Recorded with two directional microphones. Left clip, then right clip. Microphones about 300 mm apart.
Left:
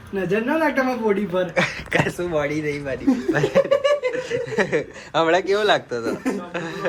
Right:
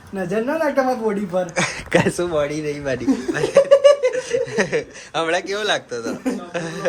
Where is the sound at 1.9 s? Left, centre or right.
Right.